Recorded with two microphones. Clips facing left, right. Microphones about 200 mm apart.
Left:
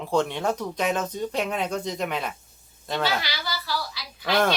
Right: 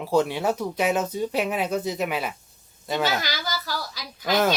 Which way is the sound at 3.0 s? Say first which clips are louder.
Left 1 dB; 45° right (ahead or behind).